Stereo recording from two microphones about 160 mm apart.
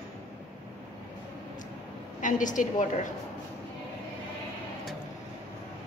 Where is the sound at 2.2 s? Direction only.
55° left (ahead or behind).